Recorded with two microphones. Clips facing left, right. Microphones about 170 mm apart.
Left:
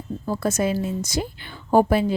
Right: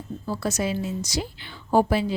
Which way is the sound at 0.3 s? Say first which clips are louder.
Left 4 dB; 50° left (ahead or behind).